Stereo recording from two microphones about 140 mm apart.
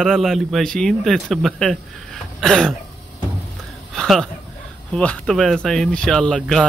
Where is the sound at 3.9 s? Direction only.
5° left (ahead or behind).